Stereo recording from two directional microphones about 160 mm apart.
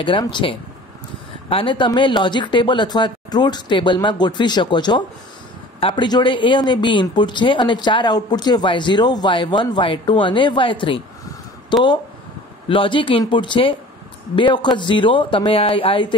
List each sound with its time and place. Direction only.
0.0 s speech: 30° left (ahead or behind)